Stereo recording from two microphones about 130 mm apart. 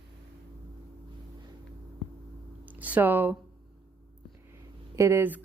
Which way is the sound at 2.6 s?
10° right (ahead or behind).